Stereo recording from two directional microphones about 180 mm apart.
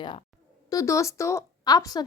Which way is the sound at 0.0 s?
25° left (ahead or behind).